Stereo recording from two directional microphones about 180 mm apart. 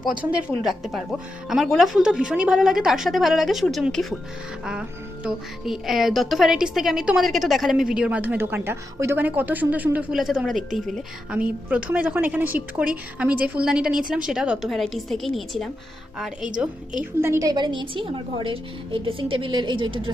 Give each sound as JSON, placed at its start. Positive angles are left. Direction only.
{"t": 0.2, "sound": "a woman's voice", "side_deg": -5}
{"t": 17.0, "sound": "a woman's voice", "side_deg": -15}